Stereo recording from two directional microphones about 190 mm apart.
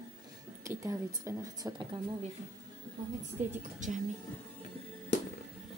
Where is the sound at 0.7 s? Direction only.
15° right (ahead or behind).